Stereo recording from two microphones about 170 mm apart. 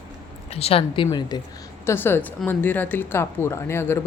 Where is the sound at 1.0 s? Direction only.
25° left (ahead or behind).